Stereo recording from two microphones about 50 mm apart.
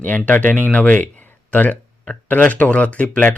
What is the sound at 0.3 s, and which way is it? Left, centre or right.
Speech, left.